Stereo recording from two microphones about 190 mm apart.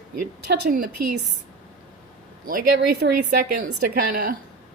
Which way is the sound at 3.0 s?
60° right (ahead or behind).